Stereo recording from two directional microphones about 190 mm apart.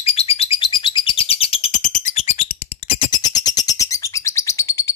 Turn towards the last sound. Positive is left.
turn(degrees=15)  # may be behind; listen again after turning